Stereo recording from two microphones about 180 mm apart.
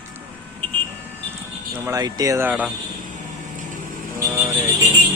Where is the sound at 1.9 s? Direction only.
20° right (ahead or behind).